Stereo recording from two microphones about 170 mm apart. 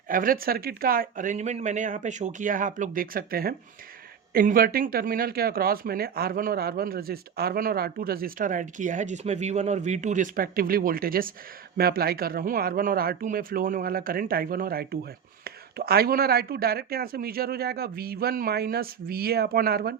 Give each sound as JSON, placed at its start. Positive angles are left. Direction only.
{"t": 0.1, "sound": "speech", "side_deg": -55}